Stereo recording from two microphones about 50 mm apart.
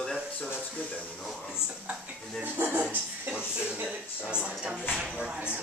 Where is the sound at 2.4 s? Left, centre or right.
Right.